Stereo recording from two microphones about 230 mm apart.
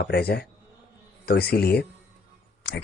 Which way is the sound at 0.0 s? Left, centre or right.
Left.